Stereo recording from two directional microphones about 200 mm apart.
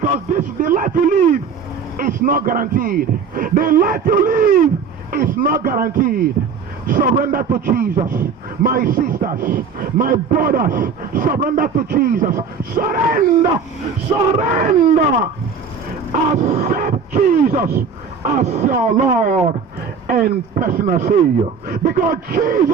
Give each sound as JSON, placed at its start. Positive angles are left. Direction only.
{"t": 0.0, "sound": "a man's voice", "side_deg": -35}
{"t": 16.3, "sound": "a man's voice", "side_deg": -35}